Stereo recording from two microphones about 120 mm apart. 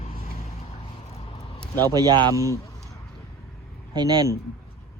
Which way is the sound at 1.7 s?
15° left (ahead or behind).